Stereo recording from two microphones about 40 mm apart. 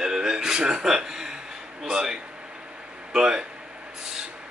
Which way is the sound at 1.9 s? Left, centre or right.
Centre.